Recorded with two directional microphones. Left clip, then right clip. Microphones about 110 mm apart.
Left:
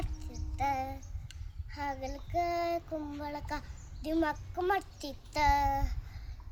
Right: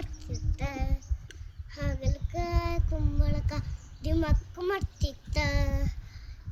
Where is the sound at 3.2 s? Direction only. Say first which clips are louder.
Even; 60° left (ahead or behind).